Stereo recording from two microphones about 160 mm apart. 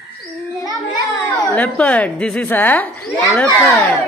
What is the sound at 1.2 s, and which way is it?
Speech, 10° left (ahead or behind).